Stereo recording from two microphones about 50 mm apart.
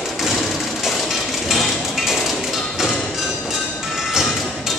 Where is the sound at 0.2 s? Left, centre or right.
Centre.